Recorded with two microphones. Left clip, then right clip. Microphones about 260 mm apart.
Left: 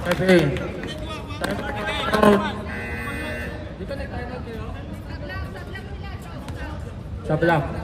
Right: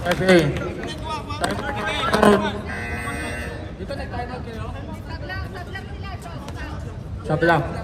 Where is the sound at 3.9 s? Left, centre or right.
Right.